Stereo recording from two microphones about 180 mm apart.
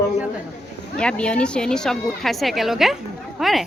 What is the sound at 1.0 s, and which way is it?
Speech, 5° left (ahead or behind).